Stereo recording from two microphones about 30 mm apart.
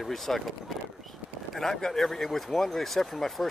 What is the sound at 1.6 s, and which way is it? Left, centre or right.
Speech, centre.